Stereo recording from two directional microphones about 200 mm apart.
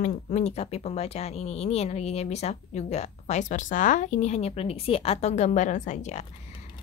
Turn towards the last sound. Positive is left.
turn(degrees=35)  # may be behind; listen again after turning